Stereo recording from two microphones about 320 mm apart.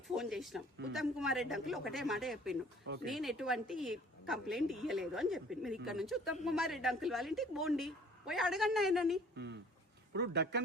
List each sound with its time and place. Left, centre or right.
0.2 s a woman's voice: centre
10.1 s speech: right